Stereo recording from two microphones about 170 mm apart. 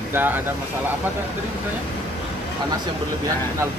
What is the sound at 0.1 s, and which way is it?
Speech, 10° right (ahead or behind).